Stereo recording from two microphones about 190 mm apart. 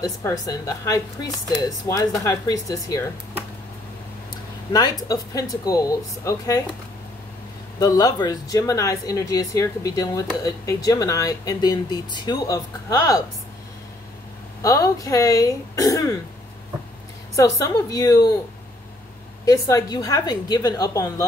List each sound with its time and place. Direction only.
0.0 s speech: 20° left (ahead or behind)
4.7 s speech: 25° left (ahead or behind)
7.8 s speech: 20° left (ahead or behind)
14.6 s speech: 15° left (ahead or behind)
17.4 s speech: 20° left (ahead or behind)
19.4 s speech: 20° left (ahead or behind)